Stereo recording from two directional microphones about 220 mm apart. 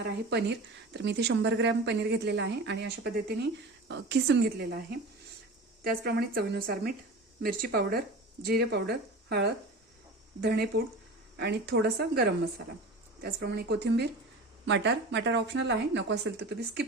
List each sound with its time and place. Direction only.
0.0 s a woman's voice: 50° right (ahead or behind)
5.8 s a woman's voice: 45° right (ahead or behind)
13.2 s a woman's voice: 50° right (ahead or behind)